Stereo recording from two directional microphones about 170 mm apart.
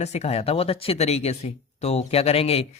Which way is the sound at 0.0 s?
40° left (ahead or behind).